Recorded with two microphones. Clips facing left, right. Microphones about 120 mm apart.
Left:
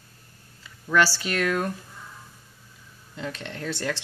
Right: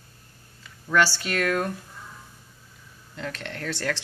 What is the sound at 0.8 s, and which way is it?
Speech, centre (ahead or behind).